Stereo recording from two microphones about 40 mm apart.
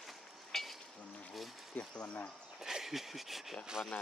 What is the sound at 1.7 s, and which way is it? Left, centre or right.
Speech, left.